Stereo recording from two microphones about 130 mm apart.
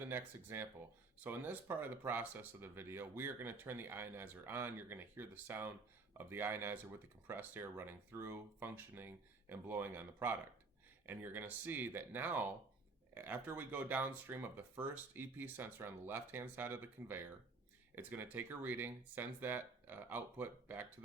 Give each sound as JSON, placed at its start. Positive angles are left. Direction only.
{"t": 0.0, "sound": "speech", "side_deg": -15}